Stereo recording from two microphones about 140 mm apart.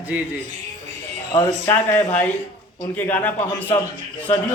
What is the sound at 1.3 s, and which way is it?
Speech, 25° left (ahead or behind).